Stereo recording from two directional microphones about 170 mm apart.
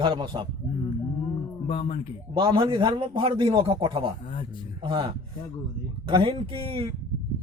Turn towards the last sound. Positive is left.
turn(degrees=-30)  # may be behind; listen again after turning